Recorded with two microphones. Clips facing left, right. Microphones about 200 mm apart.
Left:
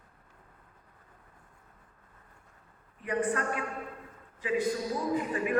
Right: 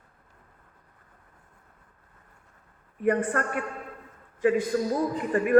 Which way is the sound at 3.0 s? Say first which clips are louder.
Right 5 dB; 55° right (ahead or behind).